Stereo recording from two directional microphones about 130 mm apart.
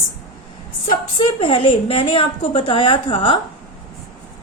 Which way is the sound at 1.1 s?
40° left (ahead or behind).